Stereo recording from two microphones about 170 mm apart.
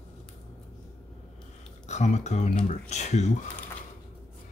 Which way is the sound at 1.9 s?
40° left (ahead or behind).